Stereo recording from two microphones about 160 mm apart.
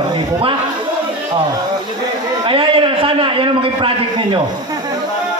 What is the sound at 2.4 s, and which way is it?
A man's voice, 35° right (ahead or behind).